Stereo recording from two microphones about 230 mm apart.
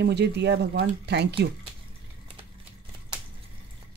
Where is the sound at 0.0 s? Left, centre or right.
Right.